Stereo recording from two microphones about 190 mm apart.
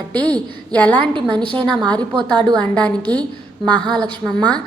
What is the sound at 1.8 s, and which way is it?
Speech, 20° right (ahead or behind).